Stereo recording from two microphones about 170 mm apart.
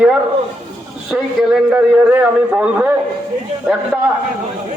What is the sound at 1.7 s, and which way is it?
A man's voice, 10° right (ahead or behind).